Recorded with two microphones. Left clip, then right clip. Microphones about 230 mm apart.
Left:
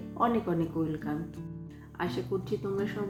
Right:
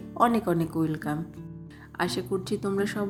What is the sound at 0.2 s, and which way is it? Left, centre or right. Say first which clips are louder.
Speech: right 5 dB; right.